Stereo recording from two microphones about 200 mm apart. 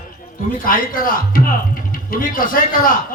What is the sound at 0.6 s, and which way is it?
A man's voice, 45° left (ahead or behind).